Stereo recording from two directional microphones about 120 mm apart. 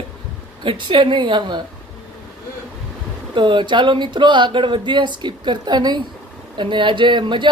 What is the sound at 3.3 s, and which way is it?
Speech, 40° right (ahead or behind).